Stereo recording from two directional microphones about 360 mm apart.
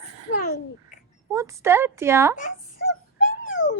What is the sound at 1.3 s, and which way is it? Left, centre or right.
Speech, centre.